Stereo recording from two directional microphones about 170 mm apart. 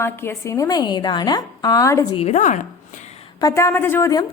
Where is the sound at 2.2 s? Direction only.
40° left (ahead or behind).